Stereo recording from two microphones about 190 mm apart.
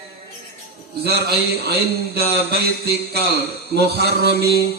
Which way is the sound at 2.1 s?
60° right (ahead or behind).